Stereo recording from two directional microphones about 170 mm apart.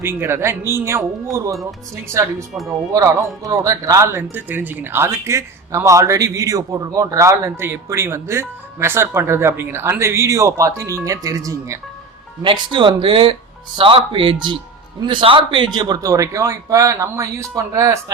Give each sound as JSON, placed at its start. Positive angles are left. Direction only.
{"t": 0.0, "sound": "a man's voice", "side_deg": -15}